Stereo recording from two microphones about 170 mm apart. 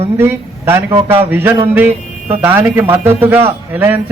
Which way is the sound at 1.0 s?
35° right (ahead or behind).